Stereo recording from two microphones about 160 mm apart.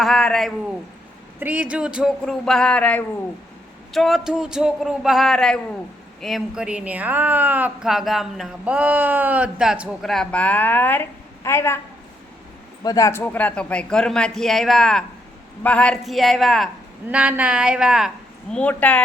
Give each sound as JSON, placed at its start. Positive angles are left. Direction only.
{"t": 0.0, "sound": "a man's voice", "side_deg": 5}
{"t": 1.4, "sound": "speech", "side_deg": -10}
{"t": 12.8, "sound": "speech", "side_deg": 20}
{"t": 18.5, "sound": "speech", "side_deg": 10}